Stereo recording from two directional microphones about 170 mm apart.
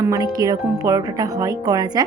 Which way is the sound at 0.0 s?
20° right (ahead or behind).